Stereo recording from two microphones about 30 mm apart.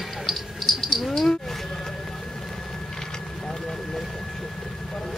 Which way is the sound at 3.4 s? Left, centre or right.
Centre.